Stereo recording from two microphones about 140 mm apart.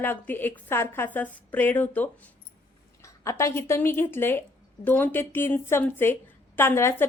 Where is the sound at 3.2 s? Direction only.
20° left (ahead or behind).